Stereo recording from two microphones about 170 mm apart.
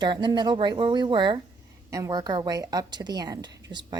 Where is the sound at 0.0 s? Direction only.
25° right (ahead or behind).